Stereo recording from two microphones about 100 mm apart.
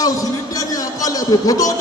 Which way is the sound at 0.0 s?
35° left (ahead or behind).